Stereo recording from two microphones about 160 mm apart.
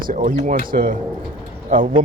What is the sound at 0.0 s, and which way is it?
Speech, 60° right (ahead or behind).